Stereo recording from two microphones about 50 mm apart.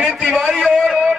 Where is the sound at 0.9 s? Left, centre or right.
Centre.